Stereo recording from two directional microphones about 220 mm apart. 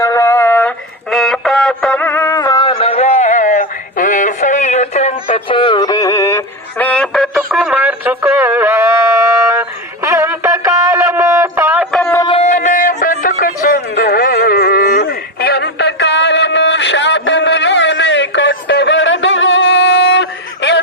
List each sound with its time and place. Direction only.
0.0 s a sound: 10° left (ahead or behind)
1.1 s music: centre (ahead or behind)
12.2 s music: 25° left (ahead or behind); by 20.8 s 50° left (ahead or behind)